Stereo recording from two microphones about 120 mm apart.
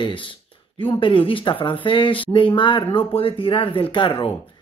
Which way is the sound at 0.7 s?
45° left (ahead or behind).